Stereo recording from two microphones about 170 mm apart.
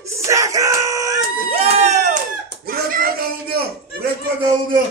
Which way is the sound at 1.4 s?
40° right (ahead or behind).